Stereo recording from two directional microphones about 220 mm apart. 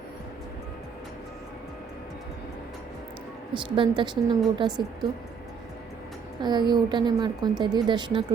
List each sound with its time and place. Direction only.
3.8 s a woman's voice: 20° right (ahead or behind)
6.4 s a woman's voice: 20° right (ahead or behind)